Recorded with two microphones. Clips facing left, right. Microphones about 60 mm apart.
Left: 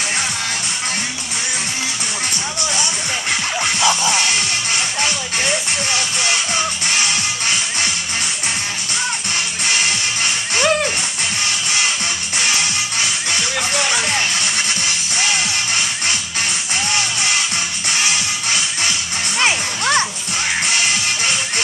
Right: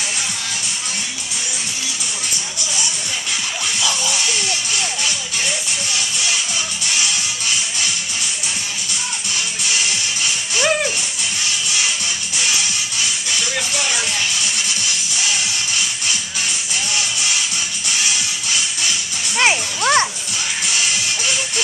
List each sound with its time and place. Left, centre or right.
3.3 s music: left
10.6 s dog: centre
13.3 s music: left
19.3 s music: centre